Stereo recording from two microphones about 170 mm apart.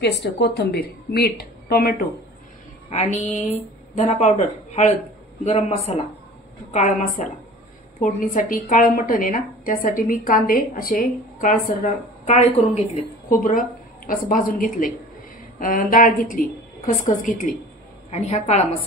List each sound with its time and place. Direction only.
0.0 s a woman's voice: 85° left; by 2.0 s 65° left (ahead or behind)
2.9 s a woman's voice: 45° left (ahead or behind)
18.1 s a woman's voice: 40° left (ahead or behind)